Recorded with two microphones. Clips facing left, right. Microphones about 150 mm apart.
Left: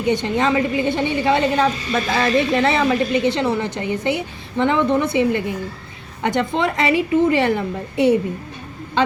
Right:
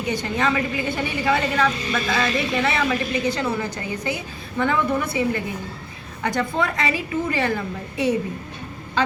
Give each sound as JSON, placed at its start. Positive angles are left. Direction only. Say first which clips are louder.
{"t": 0.0, "sound": "a woman's voice", "louder": "left 5 dB", "side_deg": 25}